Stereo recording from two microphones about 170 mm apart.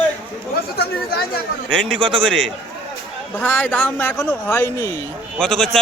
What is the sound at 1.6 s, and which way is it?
Speech, 30° right (ahead or behind).